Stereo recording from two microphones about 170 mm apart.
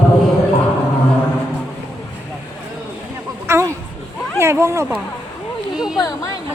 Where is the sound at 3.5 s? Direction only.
15° right (ahead or behind).